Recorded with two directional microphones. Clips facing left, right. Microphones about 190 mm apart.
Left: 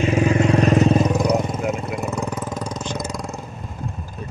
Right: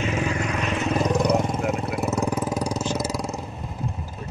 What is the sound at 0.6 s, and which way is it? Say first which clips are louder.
Vehicle: left 10 dB; 40° left (ahead or behind).